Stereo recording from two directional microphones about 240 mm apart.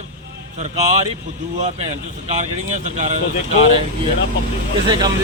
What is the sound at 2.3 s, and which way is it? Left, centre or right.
Speech, right.